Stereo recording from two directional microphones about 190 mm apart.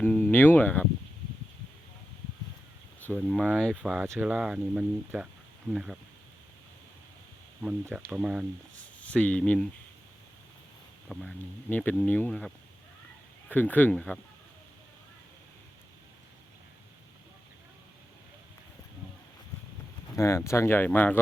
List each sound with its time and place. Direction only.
0.0 s speech: 10° left (ahead or behind)
3.2 s speech: centre (ahead or behind)
7.6 s speech: 5° right (ahead or behind)
8.8 s speech: 5° left (ahead or behind)
11.1 s speech: centre (ahead or behind)
13.5 s speech: 10° left (ahead or behind)
20.1 s speech: 15° left (ahead or behind)